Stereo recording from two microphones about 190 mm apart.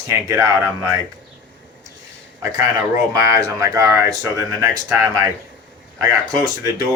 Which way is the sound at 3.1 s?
15° right (ahead or behind).